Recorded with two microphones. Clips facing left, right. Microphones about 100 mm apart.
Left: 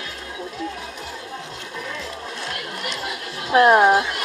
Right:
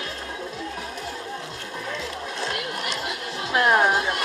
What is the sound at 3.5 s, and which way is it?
Speech, 30° left (ahead or behind).